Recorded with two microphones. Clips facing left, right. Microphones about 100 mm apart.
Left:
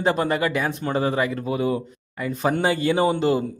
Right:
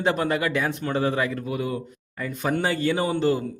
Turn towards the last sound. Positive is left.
turn(degrees=20)  # may be behind; listen again after turning